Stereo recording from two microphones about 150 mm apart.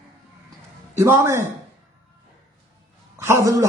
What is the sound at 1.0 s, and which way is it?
Speech, 20° right (ahead or behind).